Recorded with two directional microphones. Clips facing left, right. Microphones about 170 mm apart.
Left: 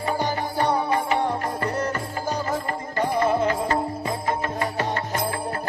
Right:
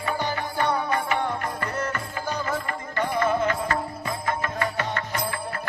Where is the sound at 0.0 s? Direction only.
35° left (ahead or behind).